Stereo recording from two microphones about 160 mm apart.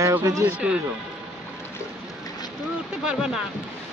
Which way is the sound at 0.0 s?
20° right (ahead or behind).